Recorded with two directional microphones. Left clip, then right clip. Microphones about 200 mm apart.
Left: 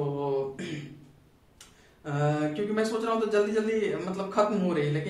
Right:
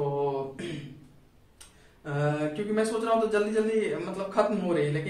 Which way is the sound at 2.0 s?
20° left (ahead or behind).